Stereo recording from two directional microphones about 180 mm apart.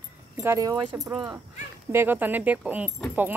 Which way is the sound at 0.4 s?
15° right (ahead or behind).